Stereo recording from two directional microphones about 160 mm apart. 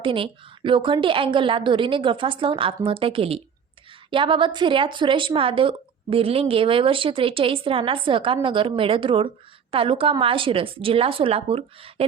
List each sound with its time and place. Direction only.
0.0 s speech: 30° right (ahead or behind)